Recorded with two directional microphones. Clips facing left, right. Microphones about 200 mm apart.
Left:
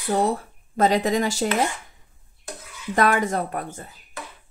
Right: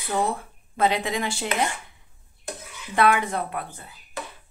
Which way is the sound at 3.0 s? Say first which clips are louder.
Left 1 dB; 40° left (ahead or behind).